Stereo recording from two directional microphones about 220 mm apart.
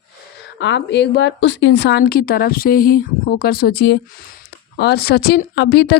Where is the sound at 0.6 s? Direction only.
55° left (ahead or behind).